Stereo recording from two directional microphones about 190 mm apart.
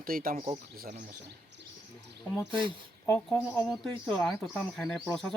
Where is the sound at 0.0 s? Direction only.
50° right (ahead or behind).